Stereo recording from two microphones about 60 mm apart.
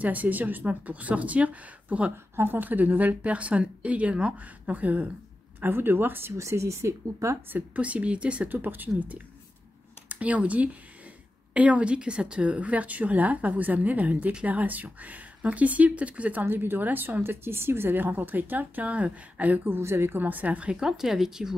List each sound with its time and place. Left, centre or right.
0.0 s speech: right
2.3 s speech: right
5.6 s speech: right
6.3 s speech: right
7.5 s speech: right
8.5 s speech: right
16.4 s speech: right
19.8 s speech: right
20.8 s speech: centre